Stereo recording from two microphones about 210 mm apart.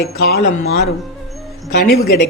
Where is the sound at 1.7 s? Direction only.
50° left (ahead or behind).